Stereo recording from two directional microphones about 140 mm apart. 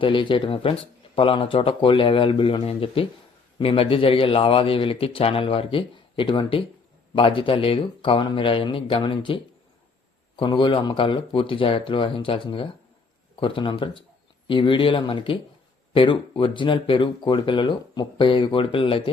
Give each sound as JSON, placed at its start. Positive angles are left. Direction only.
{"t": 0.0, "sound": "speech", "side_deg": 35}